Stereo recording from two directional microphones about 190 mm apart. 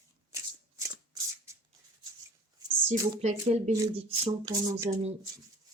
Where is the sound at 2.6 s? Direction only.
20° right (ahead or behind).